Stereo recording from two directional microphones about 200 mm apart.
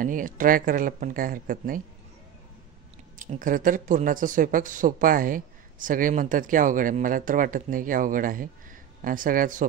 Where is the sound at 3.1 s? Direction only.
40° right (ahead or behind).